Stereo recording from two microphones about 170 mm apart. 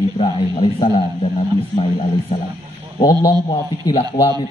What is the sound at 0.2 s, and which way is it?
A man's voice, 30° left (ahead or behind).